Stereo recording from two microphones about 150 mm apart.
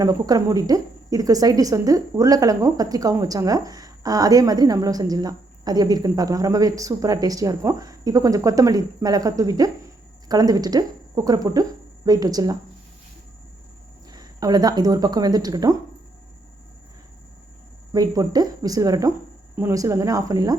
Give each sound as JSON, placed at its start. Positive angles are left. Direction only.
{"t": 0.0, "sound": "a woman's voice", "side_deg": -25}
{"t": 14.1, "sound": "speech", "side_deg": -25}
{"t": 17.9, "sound": "a woman's voice", "side_deg": -25}